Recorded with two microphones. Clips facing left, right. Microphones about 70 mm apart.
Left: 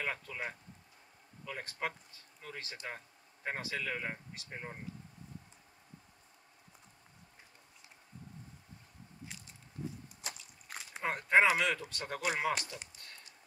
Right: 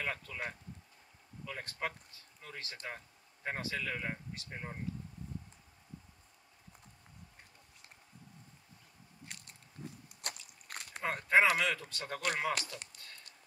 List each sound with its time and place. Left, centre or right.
0.0 s speech: centre
9.2 s biting: right
11.0 s speech: centre
12.5 s speech: right